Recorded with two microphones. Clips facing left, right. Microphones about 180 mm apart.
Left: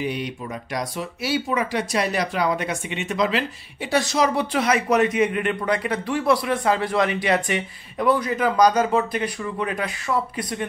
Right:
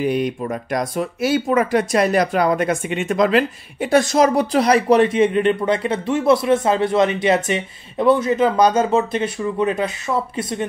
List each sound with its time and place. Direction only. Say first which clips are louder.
0.0 s speech: right 7 dB; 50° right (ahead or behind); by 10.6 s 25° right (ahead or behind)